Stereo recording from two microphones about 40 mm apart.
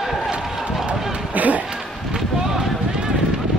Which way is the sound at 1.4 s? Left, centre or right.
Right.